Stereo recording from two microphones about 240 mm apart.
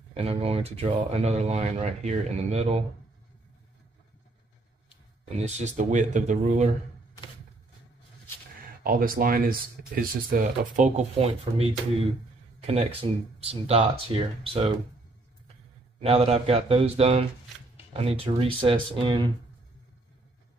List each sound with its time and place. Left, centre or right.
0.1 s speech: right
5.4 s speech: right
8.8 s speech: right
11.1 s speech: right
16.0 s speech: right